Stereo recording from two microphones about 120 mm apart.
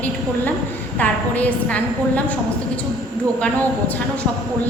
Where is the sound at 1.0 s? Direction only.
15° left (ahead or behind).